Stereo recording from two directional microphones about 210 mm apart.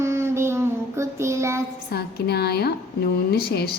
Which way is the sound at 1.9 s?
50° left (ahead or behind).